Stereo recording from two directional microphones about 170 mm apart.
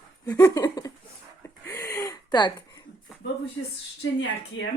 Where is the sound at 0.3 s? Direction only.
20° left (ahead or behind).